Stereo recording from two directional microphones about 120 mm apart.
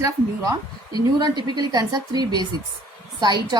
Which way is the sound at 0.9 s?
35° right (ahead or behind).